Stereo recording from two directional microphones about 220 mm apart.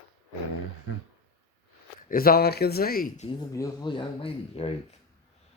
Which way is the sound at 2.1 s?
40° left (ahead or behind).